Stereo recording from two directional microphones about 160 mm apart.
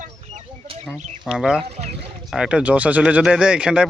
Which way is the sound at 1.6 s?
40° right (ahead or behind).